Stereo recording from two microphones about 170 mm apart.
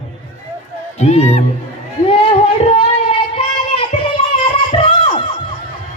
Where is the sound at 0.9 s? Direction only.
40° left (ahead or behind).